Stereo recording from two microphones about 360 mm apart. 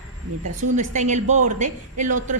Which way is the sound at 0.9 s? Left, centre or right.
Centre.